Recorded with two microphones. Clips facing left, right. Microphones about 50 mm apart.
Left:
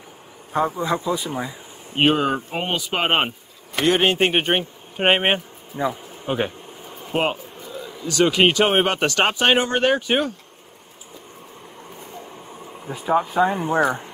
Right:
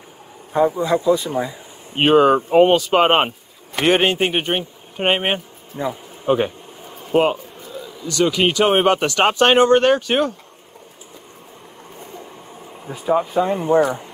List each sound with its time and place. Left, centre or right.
0.5 s speech: centre
4.3 s speech: centre
5.8 s a sound: centre
8.1 s speech: left
8.6 s speech: centre
12.0 s a sound: centre